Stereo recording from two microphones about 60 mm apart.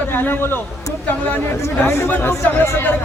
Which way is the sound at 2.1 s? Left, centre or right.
Left.